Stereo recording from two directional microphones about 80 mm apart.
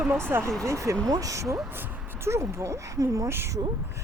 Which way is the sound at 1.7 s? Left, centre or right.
Right.